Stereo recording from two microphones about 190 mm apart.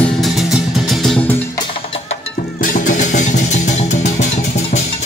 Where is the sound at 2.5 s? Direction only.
45° left (ahead or behind).